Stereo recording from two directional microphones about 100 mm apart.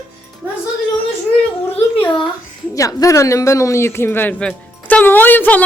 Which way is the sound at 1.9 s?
55° left (ahead or behind).